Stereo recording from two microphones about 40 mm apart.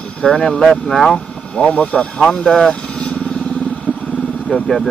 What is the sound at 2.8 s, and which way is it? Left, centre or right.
Vehicle, left.